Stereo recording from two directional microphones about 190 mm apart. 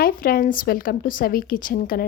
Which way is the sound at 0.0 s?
50° left (ahead or behind).